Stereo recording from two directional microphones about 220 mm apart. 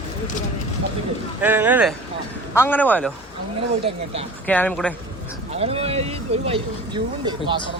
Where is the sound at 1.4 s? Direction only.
10° right (ahead or behind).